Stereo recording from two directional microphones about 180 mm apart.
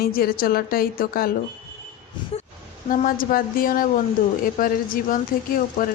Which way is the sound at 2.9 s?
50° left (ahead or behind).